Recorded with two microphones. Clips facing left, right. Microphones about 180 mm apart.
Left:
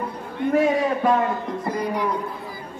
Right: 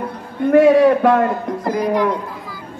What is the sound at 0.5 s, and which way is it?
A man's voice, 70° right (ahead or behind).